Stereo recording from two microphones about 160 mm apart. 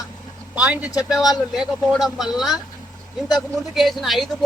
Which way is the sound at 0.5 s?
5° right (ahead or behind).